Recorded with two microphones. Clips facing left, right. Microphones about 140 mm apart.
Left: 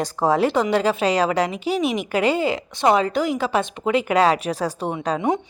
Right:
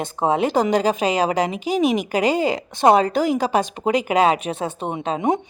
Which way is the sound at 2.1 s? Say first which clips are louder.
Right 1 dB; 35° right (ahead or behind).